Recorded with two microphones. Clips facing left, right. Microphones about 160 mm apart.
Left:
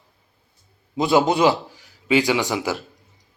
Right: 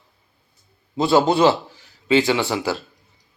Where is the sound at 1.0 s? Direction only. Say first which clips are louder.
Right 1 dB; 15° left (ahead or behind).